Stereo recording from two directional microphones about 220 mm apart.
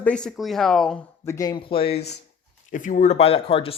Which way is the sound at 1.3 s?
15° left (ahead or behind).